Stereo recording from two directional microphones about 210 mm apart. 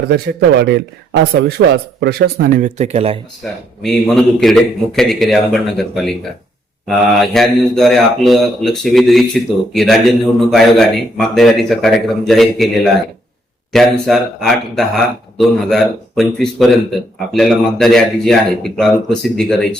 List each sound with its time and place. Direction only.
0.1 s speech: 50° right (ahead or behind); by 3.2 s 30° right (ahead or behind)
3.8 s a man's voice: centre (ahead or behind)